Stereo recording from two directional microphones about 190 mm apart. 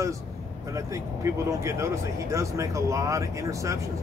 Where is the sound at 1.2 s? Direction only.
15° right (ahead or behind).